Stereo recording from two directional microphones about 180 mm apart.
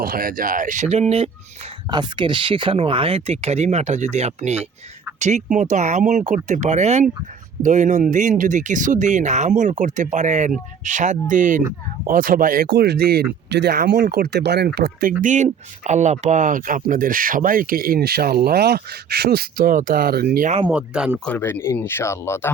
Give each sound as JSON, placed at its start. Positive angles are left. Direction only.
{"t": 0.0, "sound": "speech", "side_deg": -55}
{"t": 12.7, "sound": "speech", "side_deg": -65}
{"t": 13.5, "sound": "speech", "side_deg": -70}
{"t": 15.2, "sound": "speech", "side_deg": -45}
{"t": 20.7, "sound": "speech", "side_deg": -5}
{"t": 21.2, "sound": "speech", "side_deg": 10}